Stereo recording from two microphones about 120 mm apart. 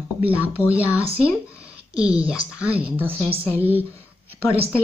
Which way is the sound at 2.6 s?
15° right (ahead or behind).